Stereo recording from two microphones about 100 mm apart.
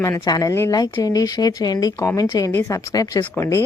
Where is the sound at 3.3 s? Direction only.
25° left (ahead or behind).